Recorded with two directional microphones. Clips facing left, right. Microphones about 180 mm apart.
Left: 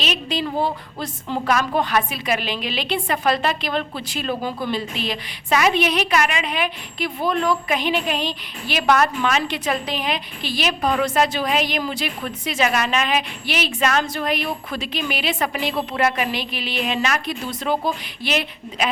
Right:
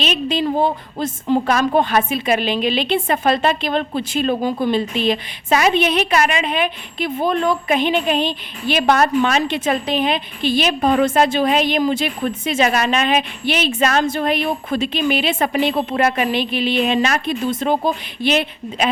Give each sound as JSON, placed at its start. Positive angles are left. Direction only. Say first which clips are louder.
{"t": 0.0, "sound": "a woman's voice", "louder": "right 5 dB", "side_deg": -25}